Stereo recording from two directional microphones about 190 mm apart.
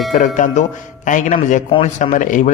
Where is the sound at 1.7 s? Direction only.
25° left (ahead or behind).